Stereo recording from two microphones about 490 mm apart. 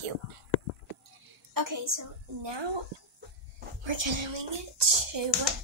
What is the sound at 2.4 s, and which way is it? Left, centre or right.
Speech, right.